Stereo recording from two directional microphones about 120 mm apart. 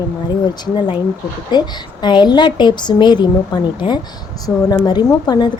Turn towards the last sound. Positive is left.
turn(degrees=40)  # may be behind; listen again after turning